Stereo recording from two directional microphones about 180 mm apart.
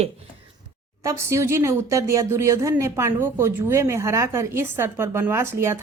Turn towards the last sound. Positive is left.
turn(degrees=-15)  # may be behind; listen again after turning